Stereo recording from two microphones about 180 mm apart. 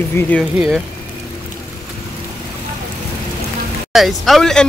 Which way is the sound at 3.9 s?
Centre (ahead or behind).